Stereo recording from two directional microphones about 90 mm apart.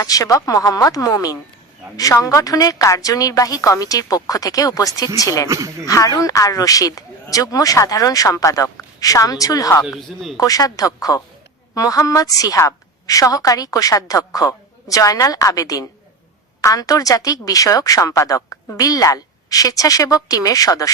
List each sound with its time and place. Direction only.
0.0 s a woman's voice: 40° left (ahead or behind)
5.5 s speech: 35° right (ahead or behind)
5.9 s a woman's voice: 40° left (ahead or behind)
10.1 s speech: centre (ahead or behind)
10.3 s a woman's voice: 40° left (ahead or behind)